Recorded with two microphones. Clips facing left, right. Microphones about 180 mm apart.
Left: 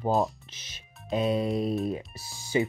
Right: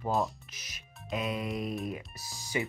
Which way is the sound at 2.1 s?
30° left (ahead or behind).